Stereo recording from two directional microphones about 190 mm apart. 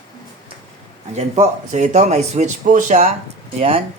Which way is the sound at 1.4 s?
40° right (ahead or behind).